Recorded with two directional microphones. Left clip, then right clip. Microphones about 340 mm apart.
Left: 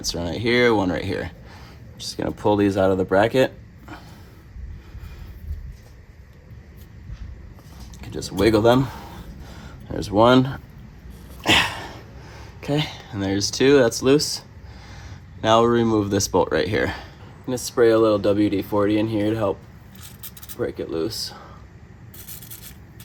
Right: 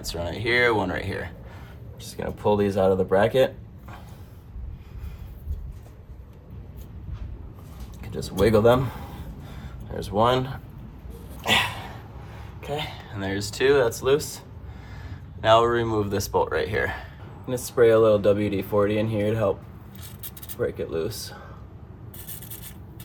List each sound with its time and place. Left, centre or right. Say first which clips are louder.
0.0 s speech: left 4 dB; centre
8.1 s speech: left 2 dB; left
11.4 s a sound: left 4 dB; left
12.5 s speech: left 5 dB; left
20.6 s speech: left 1 dB; left